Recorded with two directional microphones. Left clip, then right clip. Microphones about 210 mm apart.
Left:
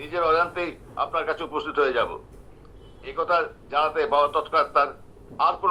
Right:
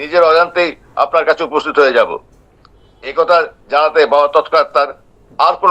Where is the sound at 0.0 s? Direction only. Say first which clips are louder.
Right 12 dB; 55° right (ahead or behind).